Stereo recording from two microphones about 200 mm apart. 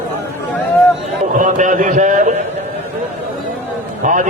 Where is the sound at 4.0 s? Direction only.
40° right (ahead or behind).